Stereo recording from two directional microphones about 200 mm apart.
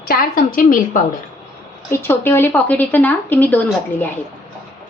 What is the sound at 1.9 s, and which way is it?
Speech, 10° left (ahead or behind).